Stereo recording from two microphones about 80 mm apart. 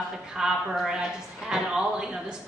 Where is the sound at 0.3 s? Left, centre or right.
Centre.